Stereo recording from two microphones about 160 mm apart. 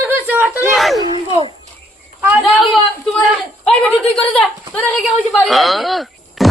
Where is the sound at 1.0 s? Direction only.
30° right (ahead or behind).